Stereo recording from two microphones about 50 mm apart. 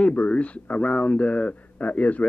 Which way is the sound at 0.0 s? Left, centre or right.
Left.